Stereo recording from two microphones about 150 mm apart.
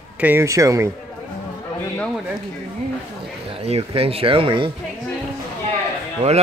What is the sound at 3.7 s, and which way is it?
Speech, 40° right (ahead or behind).